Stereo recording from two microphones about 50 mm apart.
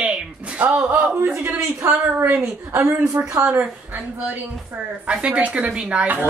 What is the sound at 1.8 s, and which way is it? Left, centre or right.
A woman's voice, right.